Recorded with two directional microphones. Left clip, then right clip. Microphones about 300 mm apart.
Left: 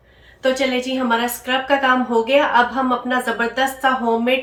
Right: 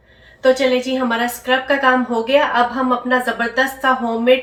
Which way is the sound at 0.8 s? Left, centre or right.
Centre.